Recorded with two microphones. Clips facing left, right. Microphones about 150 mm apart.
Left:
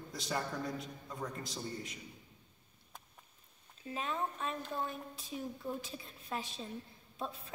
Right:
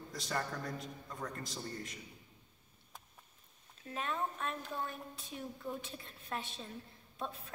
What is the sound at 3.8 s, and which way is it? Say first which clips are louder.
A woman's voice: left 1 dB; centre (ahead or behind).